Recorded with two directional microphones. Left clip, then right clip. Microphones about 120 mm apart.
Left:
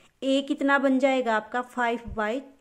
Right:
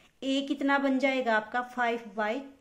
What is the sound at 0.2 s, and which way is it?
A woman's voice, 45° left (ahead or behind).